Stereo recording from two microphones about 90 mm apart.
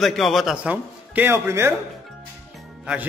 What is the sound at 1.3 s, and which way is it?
Speech, 30° right (ahead or behind).